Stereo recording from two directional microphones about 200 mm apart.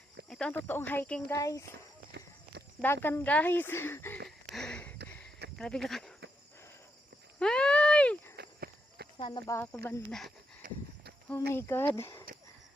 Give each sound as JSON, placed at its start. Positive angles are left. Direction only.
{"t": 0.3, "sound": "speech", "side_deg": 5}
{"t": 2.8, "sound": "speech", "side_deg": 10}
{"t": 4.5, "sound": "a sound", "side_deg": 5}
{"t": 5.5, "sound": "speech", "side_deg": 0}
{"t": 7.3, "sound": "a sound", "side_deg": 5}
{"t": 8.4, "sound": "walk", "side_deg": -55}
{"t": 9.1, "sound": "speech", "side_deg": 20}
{"t": 10.6, "sound": "livestock", "side_deg": -45}
{"t": 11.5, "sound": "speech", "side_deg": 10}